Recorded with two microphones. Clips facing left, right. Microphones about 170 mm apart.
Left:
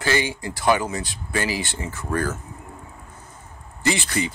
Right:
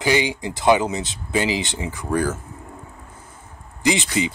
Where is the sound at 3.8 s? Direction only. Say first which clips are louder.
Right 3 dB; 15° right (ahead or behind).